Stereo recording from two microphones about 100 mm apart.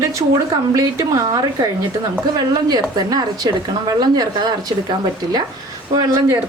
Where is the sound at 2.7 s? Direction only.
40° right (ahead or behind).